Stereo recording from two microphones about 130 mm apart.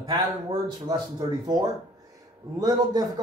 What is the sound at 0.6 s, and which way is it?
Speech, 30° right (ahead or behind).